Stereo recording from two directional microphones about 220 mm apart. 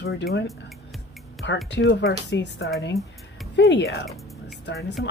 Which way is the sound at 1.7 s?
55° left (ahead or behind).